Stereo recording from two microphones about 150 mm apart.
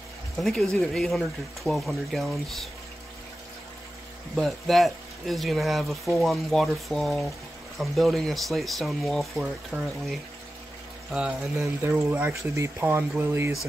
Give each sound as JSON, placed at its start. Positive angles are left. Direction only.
{"t": 0.4, "sound": "speech", "side_deg": 0}
{"t": 4.4, "sound": "speech", "side_deg": 0}